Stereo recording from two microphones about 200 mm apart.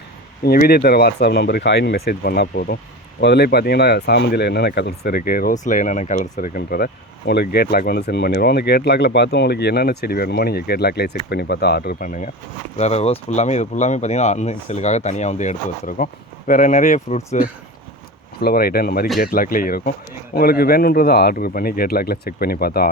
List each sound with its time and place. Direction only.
0.4 s speech: 50° left (ahead or behind)
18.3 s speech: 50° left (ahead or behind)